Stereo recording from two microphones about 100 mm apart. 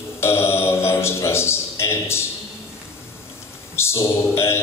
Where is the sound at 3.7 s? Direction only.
25° left (ahead or behind).